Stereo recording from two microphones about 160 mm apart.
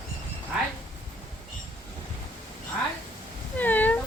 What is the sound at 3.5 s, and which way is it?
Cat, 10° left (ahead or behind).